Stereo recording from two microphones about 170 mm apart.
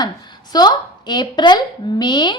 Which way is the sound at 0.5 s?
25° left (ahead or behind).